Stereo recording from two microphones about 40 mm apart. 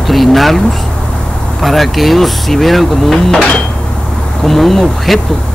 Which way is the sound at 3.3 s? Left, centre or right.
Left.